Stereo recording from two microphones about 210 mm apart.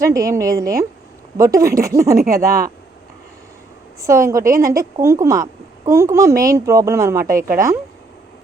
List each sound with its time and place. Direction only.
0.0 s speech: 15° right (ahead or behind)
4.0 s speech: 15° right (ahead or behind)